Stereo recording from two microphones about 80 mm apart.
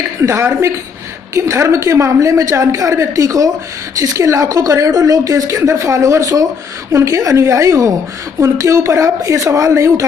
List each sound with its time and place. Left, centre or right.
0.2 s a woman's voice: right